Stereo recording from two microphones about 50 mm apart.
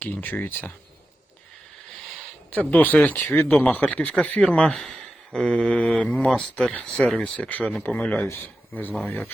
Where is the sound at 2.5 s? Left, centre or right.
Left.